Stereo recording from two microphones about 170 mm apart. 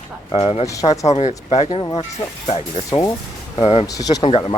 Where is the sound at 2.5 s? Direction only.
35° left (ahead or behind).